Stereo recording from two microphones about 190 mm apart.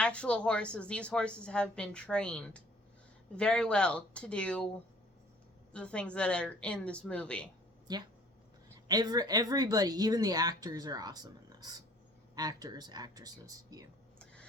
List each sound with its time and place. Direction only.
0.0 s a woman's voice: 5° left (ahead or behind)
5.7 s a woman's voice: 5° left (ahead or behind)
7.9 s speech: 20° right (ahead or behind)